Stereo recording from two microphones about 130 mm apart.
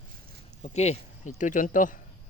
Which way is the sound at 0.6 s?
55° left (ahead or behind).